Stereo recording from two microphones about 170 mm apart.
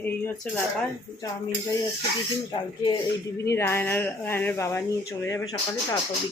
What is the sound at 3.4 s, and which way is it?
Speech, 15° left (ahead or behind).